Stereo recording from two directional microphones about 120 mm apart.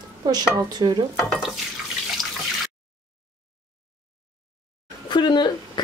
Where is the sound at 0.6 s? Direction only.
35° right (ahead or behind).